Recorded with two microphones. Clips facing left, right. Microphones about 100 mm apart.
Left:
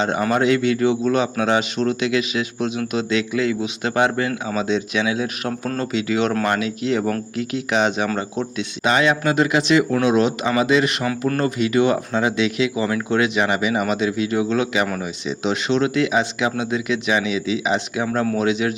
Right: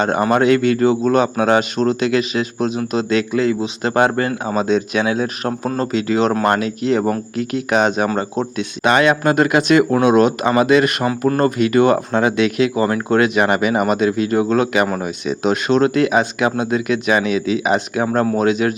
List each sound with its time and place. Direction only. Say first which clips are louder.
0.3 s speech: right 4 dB; 50° right (ahead or behind)
8.8 s speech: right 4 dB; 60° right (ahead or behind)